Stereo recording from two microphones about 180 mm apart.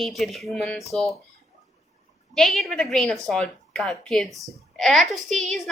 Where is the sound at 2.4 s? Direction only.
Centre (ahead or behind).